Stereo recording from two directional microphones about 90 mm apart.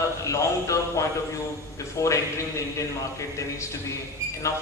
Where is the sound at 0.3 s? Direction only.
35° left (ahead or behind).